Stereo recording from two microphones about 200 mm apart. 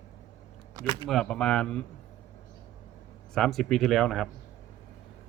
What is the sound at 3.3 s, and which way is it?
Speech, centre (ahead or behind).